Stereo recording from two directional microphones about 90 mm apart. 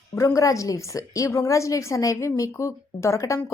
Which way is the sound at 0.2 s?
35° left (ahead or behind).